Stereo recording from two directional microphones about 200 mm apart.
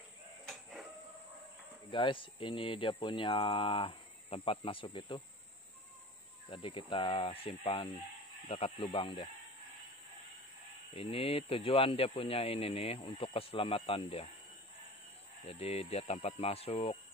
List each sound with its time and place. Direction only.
0.5 s a sound: centre (ahead or behind)
1.9 s speech: 25° left (ahead or behind)
6.5 s speech: 25° left (ahead or behind)
10.9 s speech: 30° left (ahead or behind)
15.4 s speech: 30° left (ahead or behind)